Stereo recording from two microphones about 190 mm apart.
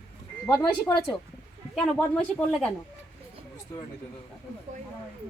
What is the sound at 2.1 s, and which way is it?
Speech, 5° left (ahead or behind).